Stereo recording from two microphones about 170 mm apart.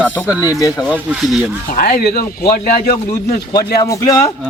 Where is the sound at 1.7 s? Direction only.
60° left (ahead or behind).